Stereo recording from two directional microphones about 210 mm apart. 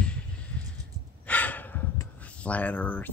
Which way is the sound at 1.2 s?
10° left (ahead or behind).